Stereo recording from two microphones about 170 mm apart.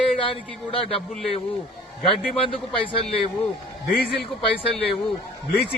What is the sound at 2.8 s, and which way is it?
Speech, 35° left (ahead or behind).